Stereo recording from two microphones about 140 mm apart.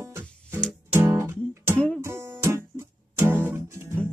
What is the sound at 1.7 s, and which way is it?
Music, 5° left (ahead or behind).